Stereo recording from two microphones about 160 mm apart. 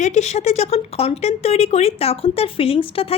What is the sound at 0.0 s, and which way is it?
Speech, 45° left (ahead or behind).